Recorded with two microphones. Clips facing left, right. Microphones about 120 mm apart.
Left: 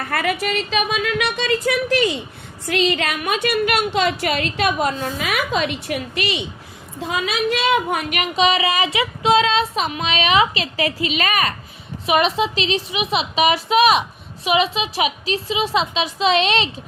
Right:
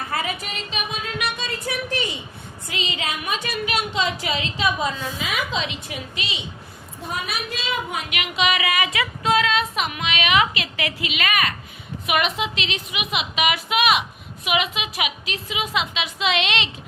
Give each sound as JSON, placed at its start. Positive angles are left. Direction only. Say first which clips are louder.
{"t": 0.0, "sound": "speech", "louder": "left 6 dB", "side_deg": 70}
{"t": 2.6, "sound": "a woman's voice", "louder": "left 9 dB", "side_deg": 65}
{"t": 4.9, "sound": "a woman's voice", "louder": "left 4 dB", "side_deg": 50}
{"t": 7.1, "sound": "speech", "louder": "left 8 dB", "side_deg": 90}